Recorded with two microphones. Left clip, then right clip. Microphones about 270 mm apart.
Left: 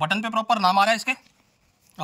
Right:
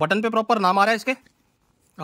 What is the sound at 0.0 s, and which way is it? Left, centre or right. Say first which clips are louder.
A man's voice: right 3 dB; right.